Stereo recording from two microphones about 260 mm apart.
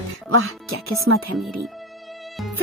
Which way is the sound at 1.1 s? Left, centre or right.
Right.